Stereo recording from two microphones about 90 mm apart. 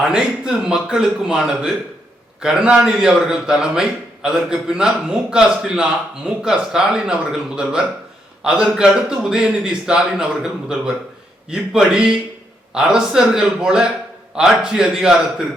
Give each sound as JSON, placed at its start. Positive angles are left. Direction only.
{"t": 0.0, "sound": "a man's voice", "side_deg": -5}